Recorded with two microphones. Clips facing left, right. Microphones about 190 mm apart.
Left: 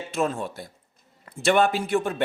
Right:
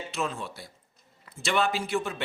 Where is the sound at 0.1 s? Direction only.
45° left (ahead or behind).